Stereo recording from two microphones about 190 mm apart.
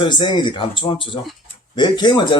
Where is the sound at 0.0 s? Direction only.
25° left (ahead or behind).